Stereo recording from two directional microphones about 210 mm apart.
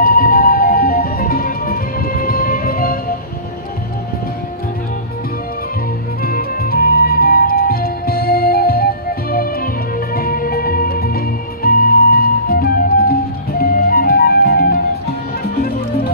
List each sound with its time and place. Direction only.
0.0 s music: 45° left (ahead or behind)
6.2 s music: 45° left (ahead or behind)